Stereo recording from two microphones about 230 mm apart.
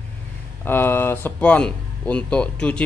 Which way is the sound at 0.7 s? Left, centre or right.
Centre.